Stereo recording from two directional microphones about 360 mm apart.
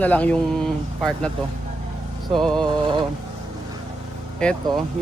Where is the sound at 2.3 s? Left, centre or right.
Centre.